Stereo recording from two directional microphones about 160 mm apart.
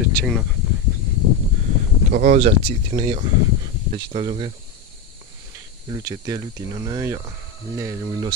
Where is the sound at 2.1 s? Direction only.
60° right (ahead or behind).